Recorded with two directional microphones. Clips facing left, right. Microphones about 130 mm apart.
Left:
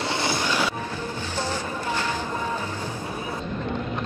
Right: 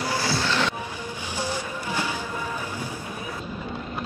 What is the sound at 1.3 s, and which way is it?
Music, 10° right (ahead or behind).